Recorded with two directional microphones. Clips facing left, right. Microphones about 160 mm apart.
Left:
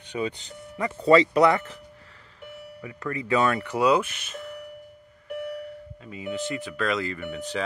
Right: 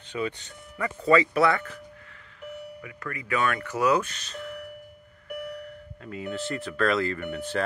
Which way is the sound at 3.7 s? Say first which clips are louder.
Left 1 dB; 15° left (ahead or behind).